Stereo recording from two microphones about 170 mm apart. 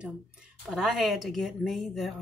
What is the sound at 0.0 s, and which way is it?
A woman's voice, 5° right (ahead or behind).